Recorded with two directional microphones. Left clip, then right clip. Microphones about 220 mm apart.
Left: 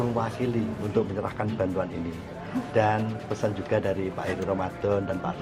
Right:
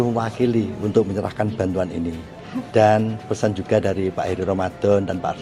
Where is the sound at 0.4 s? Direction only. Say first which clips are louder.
Right 8 dB; 50° right (ahead or behind).